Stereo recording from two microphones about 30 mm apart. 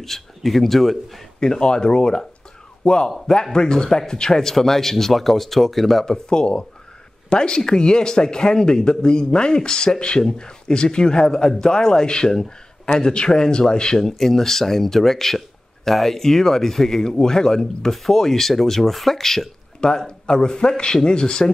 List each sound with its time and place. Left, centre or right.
0.0 s speech: centre
1.4 s a man's voice: left
4.3 s speech: centre
6.0 s speech: left
13.9 s speech: centre
17.9 s speech: centre
20.1 s speech: left